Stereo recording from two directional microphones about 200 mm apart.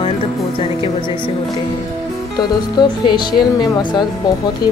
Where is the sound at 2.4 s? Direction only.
20° left (ahead or behind).